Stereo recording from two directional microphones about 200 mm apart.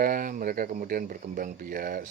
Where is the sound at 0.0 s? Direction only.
45° right (ahead or behind).